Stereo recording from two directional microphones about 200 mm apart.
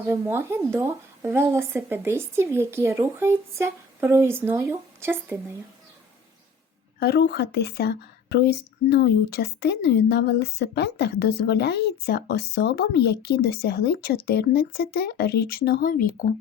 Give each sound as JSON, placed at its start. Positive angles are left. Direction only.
{"t": 0.1, "sound": "speech", "side_deg": -10}
{"t": 7.0, "sound": "speech", "side_deg": 55}